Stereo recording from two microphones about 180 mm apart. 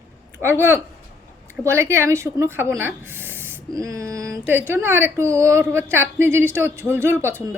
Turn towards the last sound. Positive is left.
turn(degrees=-15)  # may be behind; listen again after turning